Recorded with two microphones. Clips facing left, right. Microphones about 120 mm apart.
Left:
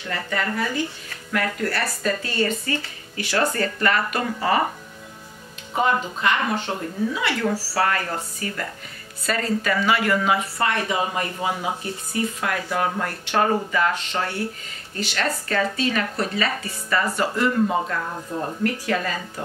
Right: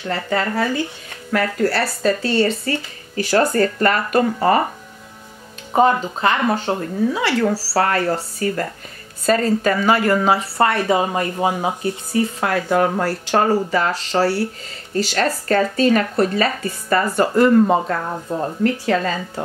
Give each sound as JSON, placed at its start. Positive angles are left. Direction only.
{"t": 0.1, "sound": "speech", "side_deg": -35}
{"t": 5.7, "sound": "speech", "side_deg": -35}
{"t": 12.6, "sound": "speech", "side_deg": -45}
{"t": 18.6, "sound": "speech", "side_deg": -30}